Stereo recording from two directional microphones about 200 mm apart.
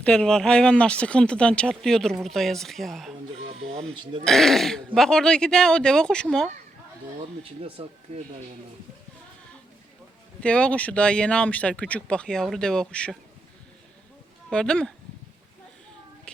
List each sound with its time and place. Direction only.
0.0 s speech: 5° left (ahead or behind)
3.5 s printer: 30° right (ahead or behind)
4.2 s speech: centre (ahead or behind)
7.6 s speech: 30° right (ahead or behind)
10.4 s speech: 5° left (ahead or behind)
14.5 s speech: 5° left (ahead or behind)